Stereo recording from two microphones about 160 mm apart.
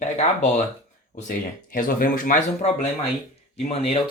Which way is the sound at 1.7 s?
60° left (ahead or behind).